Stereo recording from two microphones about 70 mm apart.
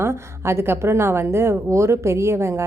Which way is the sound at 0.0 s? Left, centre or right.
Right.